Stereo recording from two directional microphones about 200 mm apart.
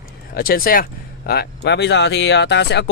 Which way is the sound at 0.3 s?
45° left (ahead or behind).